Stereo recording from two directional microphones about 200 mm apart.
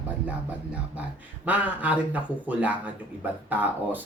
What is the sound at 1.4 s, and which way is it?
A man's voice, 5° right (ahead or behind).